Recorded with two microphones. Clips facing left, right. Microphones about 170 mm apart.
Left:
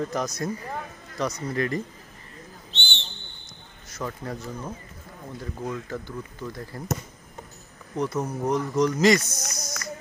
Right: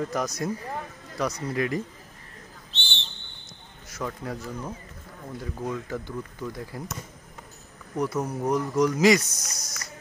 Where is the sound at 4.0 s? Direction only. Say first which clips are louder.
Even; 5° right (ahead or behind).